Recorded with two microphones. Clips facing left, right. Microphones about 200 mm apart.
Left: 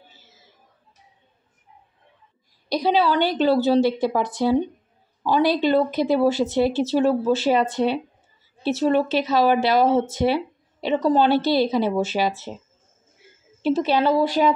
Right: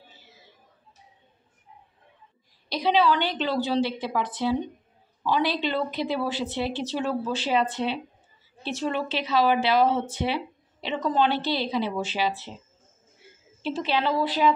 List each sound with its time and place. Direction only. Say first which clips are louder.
2.7 s speech: left 3 dB; 40° left (ahead or behind)
13.6 s speech: left 7 dB; 45° left (ahead or behind)